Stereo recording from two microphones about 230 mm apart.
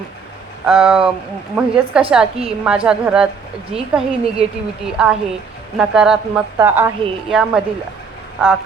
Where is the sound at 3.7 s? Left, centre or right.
Right.